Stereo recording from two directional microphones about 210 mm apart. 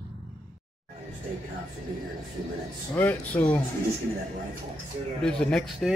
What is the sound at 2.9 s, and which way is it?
Speech, 10° left (ahead or behind).